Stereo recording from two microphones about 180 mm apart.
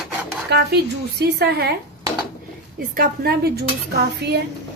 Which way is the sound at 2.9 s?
55° right (ahead or behind).